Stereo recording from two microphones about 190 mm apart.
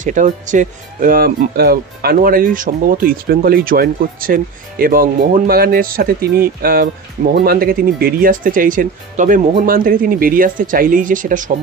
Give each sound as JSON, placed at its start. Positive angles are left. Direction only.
{"t": 0.0, "sound": "speech", "side_deg": -40}